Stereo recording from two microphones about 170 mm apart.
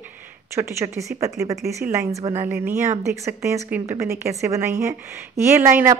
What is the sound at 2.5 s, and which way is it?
A woman's voice, 10° right (ahead or behind).